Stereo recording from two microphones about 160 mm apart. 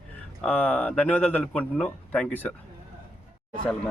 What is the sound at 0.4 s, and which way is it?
Speech, 10° left (ahead or behind).